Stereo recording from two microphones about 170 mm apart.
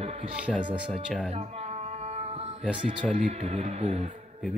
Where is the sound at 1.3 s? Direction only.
40° right (ahead or behind).